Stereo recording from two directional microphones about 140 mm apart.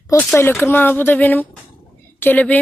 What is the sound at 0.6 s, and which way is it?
A woman's voice, 15° left (ahead or behind).